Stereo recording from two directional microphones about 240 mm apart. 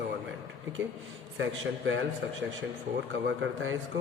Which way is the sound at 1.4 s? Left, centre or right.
Right.